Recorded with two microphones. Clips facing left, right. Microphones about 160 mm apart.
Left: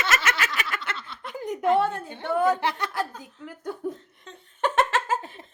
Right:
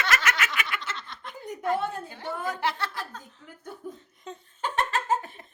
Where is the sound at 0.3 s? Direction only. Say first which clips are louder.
Left 1 dB; 30° left (ahead or behind).